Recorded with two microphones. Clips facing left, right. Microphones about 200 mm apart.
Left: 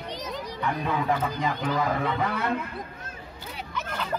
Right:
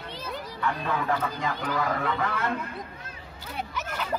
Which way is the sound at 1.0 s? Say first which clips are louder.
Left 2 dB; 15° left (ahead or behind).